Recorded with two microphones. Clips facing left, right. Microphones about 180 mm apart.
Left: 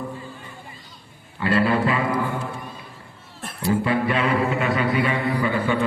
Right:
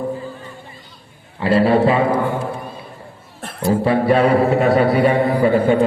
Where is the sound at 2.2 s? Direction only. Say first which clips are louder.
Right 6 dB; 45° right (ahead or behind).